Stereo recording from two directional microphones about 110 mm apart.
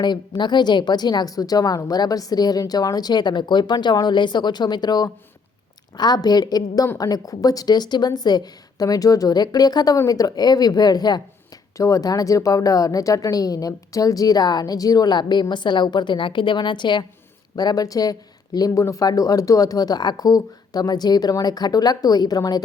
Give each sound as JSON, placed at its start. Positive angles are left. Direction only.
{"t": 0.0, "sound": "a woman's voice", "side_deg": 40}